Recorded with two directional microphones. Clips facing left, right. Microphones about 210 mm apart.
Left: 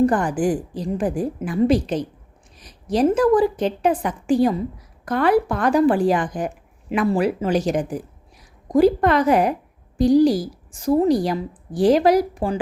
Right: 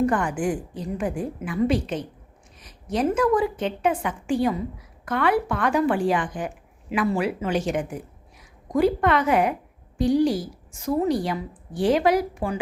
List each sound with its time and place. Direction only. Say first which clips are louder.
0.0 s a woman's voice: left 4 dB; 35° left (ahead or behind)